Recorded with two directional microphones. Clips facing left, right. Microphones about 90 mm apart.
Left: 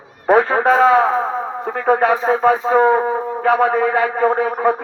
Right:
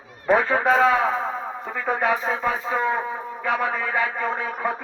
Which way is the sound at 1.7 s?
55° left (ahead or behind).